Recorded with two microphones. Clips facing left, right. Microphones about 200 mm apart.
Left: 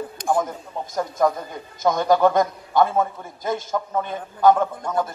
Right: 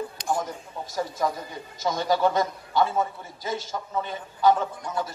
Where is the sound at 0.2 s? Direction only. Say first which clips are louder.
Left 7 dB; 50° left (ahead or behind).